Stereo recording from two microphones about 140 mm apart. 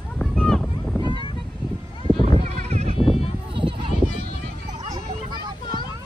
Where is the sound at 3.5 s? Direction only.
40° right (ahead or behind).